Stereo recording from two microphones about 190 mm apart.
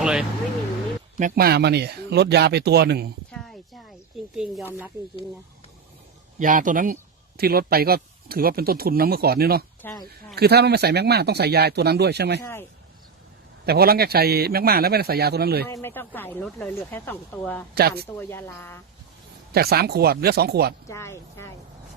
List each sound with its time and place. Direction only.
0.0 s speech: 5° right (ahead or behind)
1.2 s speech: 55° right (ahead or behind)
3.3 s a sound: centre (ahead or behind)
4.4 s speech: 5° right (ahead or behind)
6.4 s speech: 45° right (ahead or behind); by 12.4 s 60° right (ahead or behind)
12.4 s speech: 10° left (ahead or behind)
13.7 s speech: 55° right (ahead or behind)
15.7 s speech: 10° left (ahead or behind)
17.7 s speech: 55° right (ahead or behind)
18.2 s speech: 10° left (ahead or behind)
19.5 s speech: 55° right (ahead or behind)
20.8 s speech: 15° left (ahead or behind)